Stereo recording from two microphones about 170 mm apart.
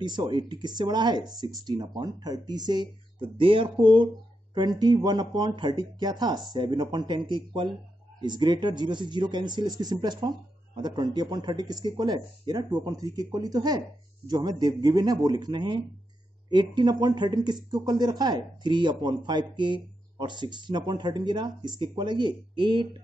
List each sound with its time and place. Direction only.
0.0 s speech: 25° right (ahead or behind)